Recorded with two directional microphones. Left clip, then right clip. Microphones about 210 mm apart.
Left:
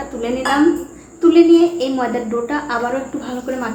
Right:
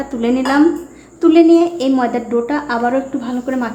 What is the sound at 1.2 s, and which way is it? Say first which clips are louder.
A woman's voice: right 1 dB; 40° right (ahead or behind).